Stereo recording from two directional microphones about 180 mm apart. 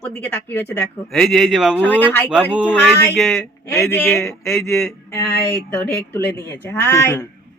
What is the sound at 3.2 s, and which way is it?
Speech, 5° left (ahead or behind).